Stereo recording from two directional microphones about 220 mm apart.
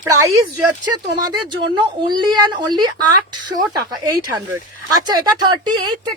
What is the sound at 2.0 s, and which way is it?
Speech, 20° right (ahead or behind).